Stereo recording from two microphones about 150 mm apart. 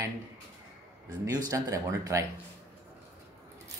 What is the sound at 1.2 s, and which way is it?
Speech, 20° right (ahead or behind).